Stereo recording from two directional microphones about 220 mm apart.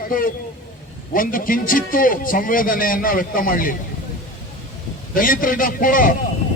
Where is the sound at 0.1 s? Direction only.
40° left (ahead or behind).